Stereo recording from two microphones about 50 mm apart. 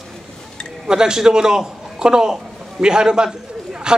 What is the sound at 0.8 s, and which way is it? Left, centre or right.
A man's voice, centre.